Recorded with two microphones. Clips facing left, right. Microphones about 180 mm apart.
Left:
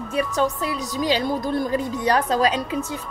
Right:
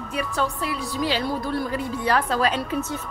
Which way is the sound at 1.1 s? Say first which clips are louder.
Left 3 dB; 20° left (ahead or behind).